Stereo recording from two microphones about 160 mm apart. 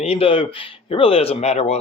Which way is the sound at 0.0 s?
35° left (ahead or behind).